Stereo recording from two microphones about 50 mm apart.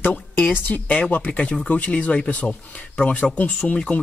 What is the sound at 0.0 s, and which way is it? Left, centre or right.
Speech, left.